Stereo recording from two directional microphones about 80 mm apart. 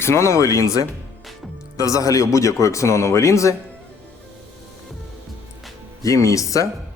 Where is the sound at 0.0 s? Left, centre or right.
Left.